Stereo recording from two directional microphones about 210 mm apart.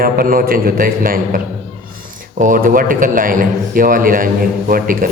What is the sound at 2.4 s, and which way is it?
A man's voice, 40° right (ahead or behind).